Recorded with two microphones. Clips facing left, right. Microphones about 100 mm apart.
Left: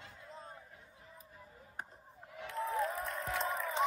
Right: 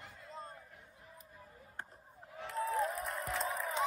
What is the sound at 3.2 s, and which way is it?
Music, centre (ahead or behind).